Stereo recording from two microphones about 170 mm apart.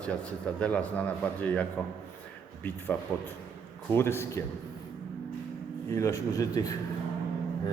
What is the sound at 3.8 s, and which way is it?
Speech, 15° left (ahead or behind).